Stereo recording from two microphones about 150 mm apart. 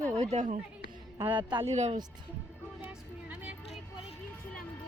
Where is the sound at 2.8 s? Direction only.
10° right (ahead or behind).